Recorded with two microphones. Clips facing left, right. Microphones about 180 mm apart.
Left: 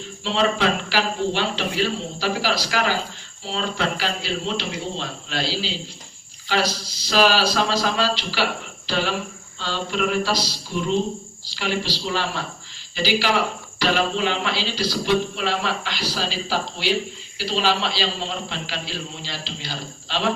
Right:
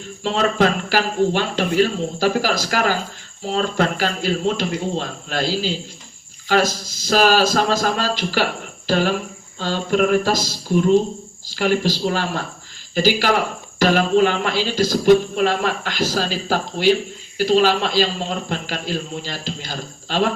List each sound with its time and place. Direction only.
0.2 s speech: 50° right (ahead or behind)